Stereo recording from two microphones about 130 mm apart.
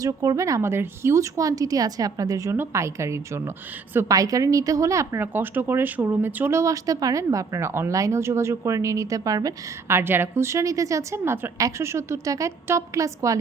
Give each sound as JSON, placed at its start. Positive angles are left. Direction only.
{"t": 0.0, "sound": "a woman's voice", "side_deg": -25}